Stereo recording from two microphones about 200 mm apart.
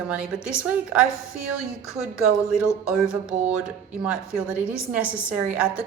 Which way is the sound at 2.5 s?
5° right (ahead or behind).